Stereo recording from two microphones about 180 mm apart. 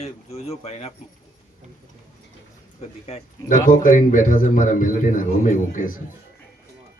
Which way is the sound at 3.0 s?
40° left (ahead or behind).